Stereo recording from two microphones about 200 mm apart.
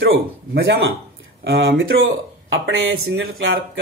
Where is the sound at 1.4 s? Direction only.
55° right (ahead or behind); by 3.8 s 75° right (ahead or behind).